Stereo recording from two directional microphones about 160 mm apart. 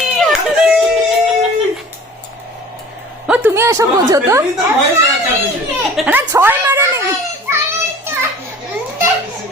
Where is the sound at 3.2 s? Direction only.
10° right (ahead or behind).